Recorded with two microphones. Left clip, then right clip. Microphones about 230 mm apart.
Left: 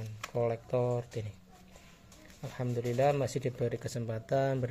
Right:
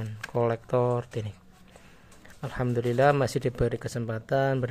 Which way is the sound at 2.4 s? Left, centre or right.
Centre.